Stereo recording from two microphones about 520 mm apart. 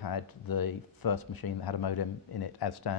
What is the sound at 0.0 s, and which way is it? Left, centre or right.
Speech, left.